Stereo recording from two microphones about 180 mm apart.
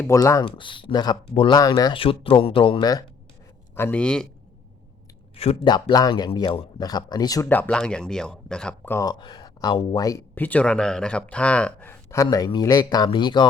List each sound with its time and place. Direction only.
0.0 s speech: 15° left (ahead or behind)
3.8 s speech: 10° left (ahead or behind)
5.3 s speech: 35° left (ahead or behind)